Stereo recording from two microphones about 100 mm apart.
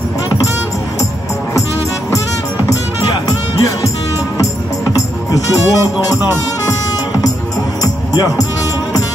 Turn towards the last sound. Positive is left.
turn(degrees=35)  # may be behind; listen again after turning